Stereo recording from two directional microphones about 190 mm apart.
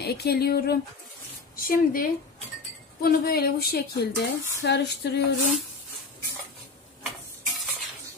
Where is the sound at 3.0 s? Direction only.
55° left (ahead or behind).